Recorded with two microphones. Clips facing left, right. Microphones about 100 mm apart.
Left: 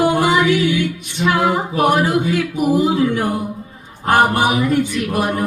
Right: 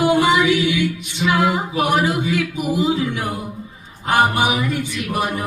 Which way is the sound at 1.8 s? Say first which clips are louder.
Left 4 dB; 45° left (ahead or behind).